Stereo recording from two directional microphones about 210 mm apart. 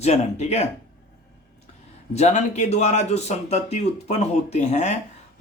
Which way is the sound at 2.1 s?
35° left (ahead or behind).